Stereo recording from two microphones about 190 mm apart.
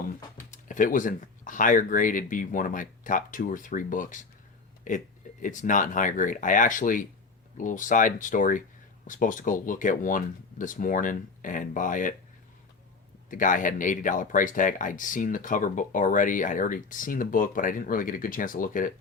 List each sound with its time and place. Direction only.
0.5 s speech: 40° left (ahead or behind)
13.3 s speech: 45° left (ahead or behind)